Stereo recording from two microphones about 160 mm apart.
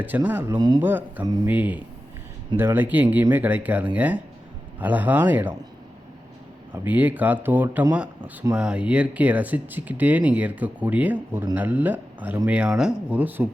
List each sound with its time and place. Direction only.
0.0 s speech: 10° right (ahead or behind)
0.5 s speech: 25° right (ahead or behind)
0.8 s speech: 10° right (ahead or behind)
6.7 s speech: 10° right (ahead or behind)